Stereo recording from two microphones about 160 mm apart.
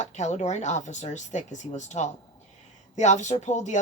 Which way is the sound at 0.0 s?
50° left (ahead or behind).